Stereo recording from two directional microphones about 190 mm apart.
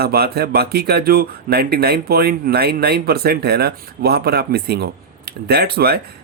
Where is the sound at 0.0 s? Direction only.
55° right (ahead or behind).